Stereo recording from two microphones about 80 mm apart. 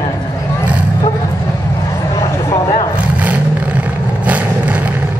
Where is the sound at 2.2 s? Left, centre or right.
Left.